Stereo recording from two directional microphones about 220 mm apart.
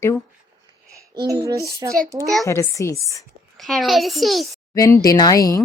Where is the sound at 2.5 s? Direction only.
15° left (ahead or behind).